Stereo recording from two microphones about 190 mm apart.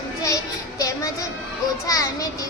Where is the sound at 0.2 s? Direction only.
15° left (ahead or behind).